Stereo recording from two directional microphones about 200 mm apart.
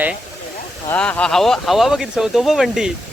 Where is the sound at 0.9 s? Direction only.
5° left (ahead or behind).